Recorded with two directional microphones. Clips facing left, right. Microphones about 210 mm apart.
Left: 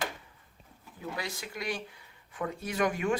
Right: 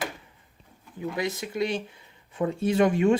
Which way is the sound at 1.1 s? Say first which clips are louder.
Right 9 dB; 20° right (ahead or behind).